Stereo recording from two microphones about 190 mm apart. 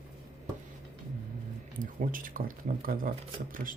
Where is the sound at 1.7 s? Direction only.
45° right (ahead or behind).